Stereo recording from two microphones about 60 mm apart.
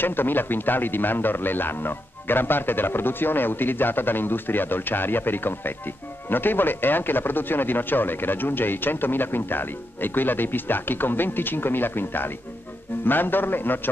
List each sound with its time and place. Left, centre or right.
0.0 s speech: left